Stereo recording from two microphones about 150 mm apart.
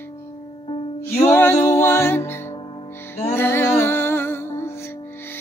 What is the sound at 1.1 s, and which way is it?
Music, 15° left (ahead or behind).